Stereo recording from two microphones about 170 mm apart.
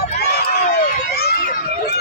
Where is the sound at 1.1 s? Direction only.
70° left (ahead or behind).